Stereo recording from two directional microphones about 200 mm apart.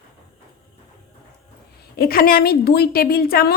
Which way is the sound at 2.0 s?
50° left (ahead or behind).